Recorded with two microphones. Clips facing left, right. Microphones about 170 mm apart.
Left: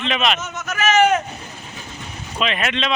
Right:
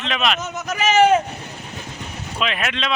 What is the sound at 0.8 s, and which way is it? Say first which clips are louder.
Vehicle: right 1 dB; 30° right (ahead or behind).